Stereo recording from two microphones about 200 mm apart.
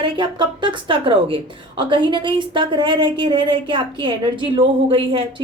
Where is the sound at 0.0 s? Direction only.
25° right (ahead or behind).